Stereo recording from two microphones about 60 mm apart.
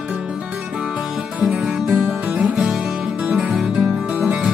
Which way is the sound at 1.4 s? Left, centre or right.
Centre.